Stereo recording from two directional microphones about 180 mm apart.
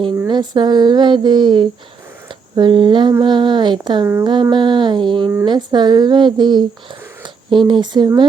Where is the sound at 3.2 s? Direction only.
25° right (ahead or behind).